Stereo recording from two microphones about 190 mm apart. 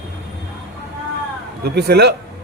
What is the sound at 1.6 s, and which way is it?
Speech, 55° right (ahead or behind).